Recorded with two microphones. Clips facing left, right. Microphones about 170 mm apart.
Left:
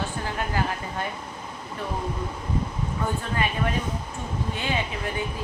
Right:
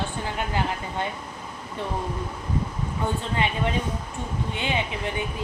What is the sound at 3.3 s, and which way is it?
Speech, 20° right (ahead or behind).